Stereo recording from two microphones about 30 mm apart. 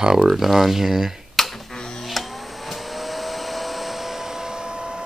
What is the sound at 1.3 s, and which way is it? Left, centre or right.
Finger snapping, centre.